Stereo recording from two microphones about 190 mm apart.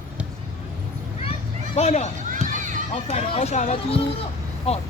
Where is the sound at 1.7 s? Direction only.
35° left (ahead or behind).